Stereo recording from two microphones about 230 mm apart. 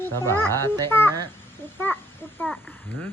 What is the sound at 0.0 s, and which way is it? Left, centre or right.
Speech, centre.